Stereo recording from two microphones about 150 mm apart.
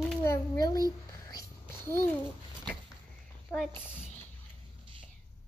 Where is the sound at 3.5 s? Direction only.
Centre (ahead or behind).